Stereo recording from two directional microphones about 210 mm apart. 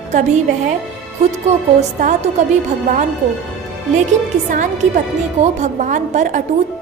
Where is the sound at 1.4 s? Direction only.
35° right (ahead or behind).